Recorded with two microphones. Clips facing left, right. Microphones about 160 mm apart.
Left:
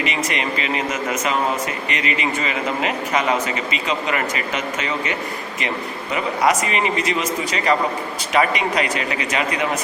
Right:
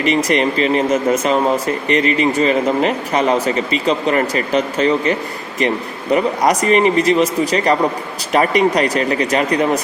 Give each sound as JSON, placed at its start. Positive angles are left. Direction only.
{"t": 0.0, "sound": "speech", "side_deg": -40}